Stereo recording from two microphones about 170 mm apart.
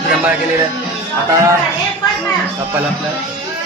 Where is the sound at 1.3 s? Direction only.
15° right (ahead or behind).